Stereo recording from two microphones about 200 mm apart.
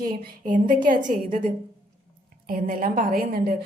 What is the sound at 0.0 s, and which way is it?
A woman's voice, 40° right (ahead or behind).